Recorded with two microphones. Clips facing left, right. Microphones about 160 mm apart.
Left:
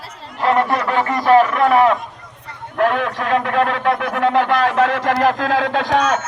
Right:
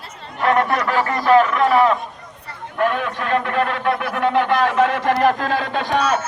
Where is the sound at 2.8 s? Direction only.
90° left.